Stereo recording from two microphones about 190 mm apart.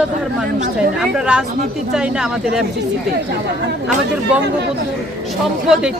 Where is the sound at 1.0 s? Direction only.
5° right (ahead or behind).